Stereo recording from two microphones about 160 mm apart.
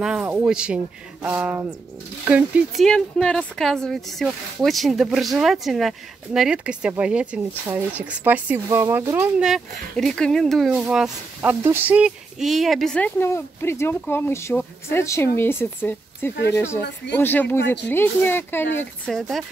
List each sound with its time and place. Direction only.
0.0 s speech: 5° right (ahead or behind)
2.8 s speech: 5° left (ahead or behind); by 9.5 s 15° right (ahead or behind)
9.5 s speech: 5° left (ahead or behind)
16.8 s speech: 90° left
17.2 s speech: 10° left (ahead or behind)
19.0 s speech: centre (ahead or behind)